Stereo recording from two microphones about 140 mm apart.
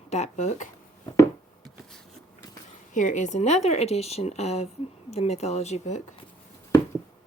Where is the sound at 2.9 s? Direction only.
60° left (ahead or behind).